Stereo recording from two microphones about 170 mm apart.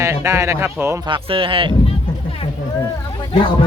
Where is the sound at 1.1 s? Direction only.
30° right (ahead or behind).